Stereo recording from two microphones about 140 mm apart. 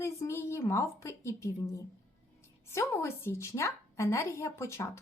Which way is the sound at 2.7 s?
20° left (ahead or behind).